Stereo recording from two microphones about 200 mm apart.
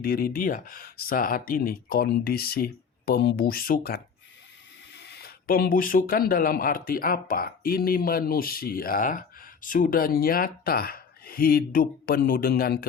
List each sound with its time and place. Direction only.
0.0 s speech: 45° left (ahead or behind)